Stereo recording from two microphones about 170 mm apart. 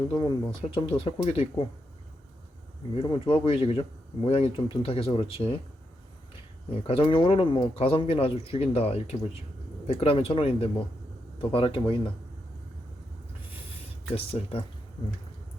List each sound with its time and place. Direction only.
0.1 s speech: 25° left (ahead or behind)
2.9 s speech: 35° left (ahead or behind)
6.8 s speech: 30° left (ahead or behind)
14.3 s speech: 35° left (ahead or behind)